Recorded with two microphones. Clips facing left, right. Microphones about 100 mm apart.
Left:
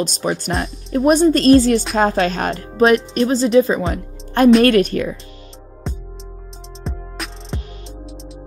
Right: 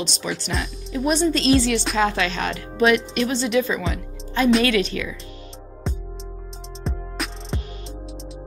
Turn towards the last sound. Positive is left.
turn(degrees=0)  # may be behind; listen again after turning